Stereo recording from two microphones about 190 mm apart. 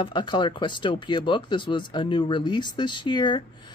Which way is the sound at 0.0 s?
25° left (ahead or behind).